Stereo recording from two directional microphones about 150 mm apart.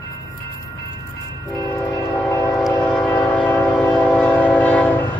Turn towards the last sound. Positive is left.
turn(degrees=10)  # may be behind; listen again after turning